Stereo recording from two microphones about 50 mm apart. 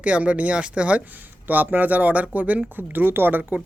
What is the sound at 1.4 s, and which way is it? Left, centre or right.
Speech, right.